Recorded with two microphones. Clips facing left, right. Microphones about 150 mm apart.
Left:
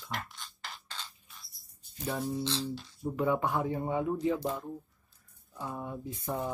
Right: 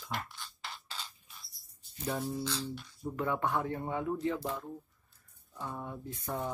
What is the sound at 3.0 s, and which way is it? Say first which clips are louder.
Speech: left 4 dB; 10° left (ahead or behind).